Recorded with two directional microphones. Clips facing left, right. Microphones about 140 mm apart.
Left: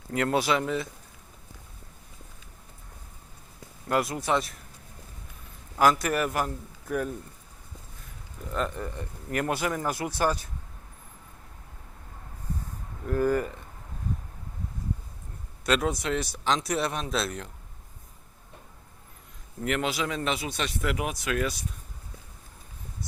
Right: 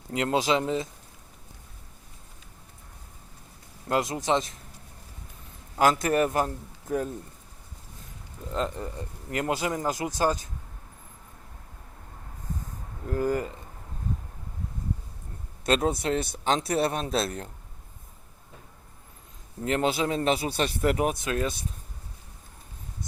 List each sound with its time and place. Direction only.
0.1 s speech: 20° right (ahead or behind)
3.8 s speech: 20° right (ahead or behind)
5.7 s speech: 25° right (ahead or behind)
8.5 s speech: 25° right (ahead or behind)
13.1 s speech: 20° right (ahead or behind)
15.6 s speech: 30° right (ahead or behind)
16.2 s speech: 55° right (ahead or behind)
16.6 s speech: 30° right (ahead or behind)
19.6 s speech: 30° right (ahead or behind)